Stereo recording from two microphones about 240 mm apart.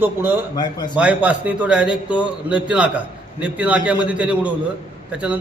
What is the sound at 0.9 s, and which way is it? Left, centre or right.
A man's voice, centre.